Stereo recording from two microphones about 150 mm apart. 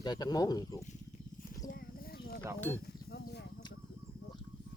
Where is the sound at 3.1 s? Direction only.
90° left.